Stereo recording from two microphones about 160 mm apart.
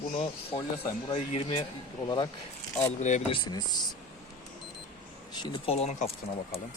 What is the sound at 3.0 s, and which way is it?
Speech, 45° left (ahead or behind).